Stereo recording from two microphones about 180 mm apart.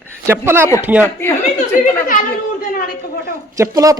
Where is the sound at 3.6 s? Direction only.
20° right (ahead or behind).